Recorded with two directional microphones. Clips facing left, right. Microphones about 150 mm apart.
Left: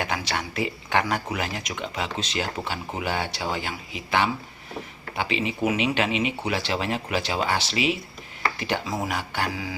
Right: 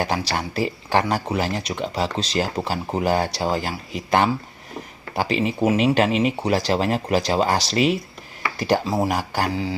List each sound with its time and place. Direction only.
0.0 s speech: 35° right (ahead or behind)